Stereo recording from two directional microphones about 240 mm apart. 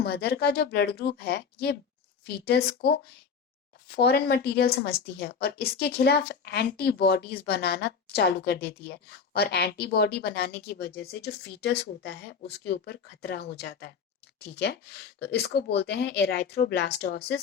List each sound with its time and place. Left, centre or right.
0.0 s a woman's voice: left